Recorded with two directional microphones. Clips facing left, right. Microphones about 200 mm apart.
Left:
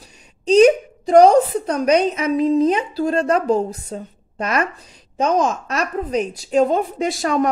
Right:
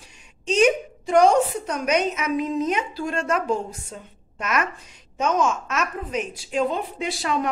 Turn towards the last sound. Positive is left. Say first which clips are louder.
# left 6 dB
turn(degrees=45)  # may be behind; listen again after turning